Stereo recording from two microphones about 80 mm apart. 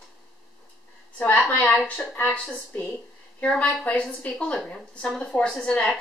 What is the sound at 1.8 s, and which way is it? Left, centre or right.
Speech, centre.